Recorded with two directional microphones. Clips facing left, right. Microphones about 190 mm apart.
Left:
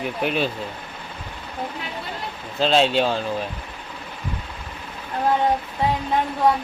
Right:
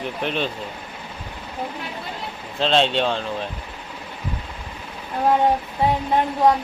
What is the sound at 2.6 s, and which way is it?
Speech, 5° left (ahead or behind).